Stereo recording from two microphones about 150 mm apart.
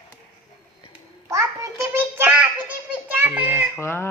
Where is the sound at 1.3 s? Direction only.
20° right (ahead or behind).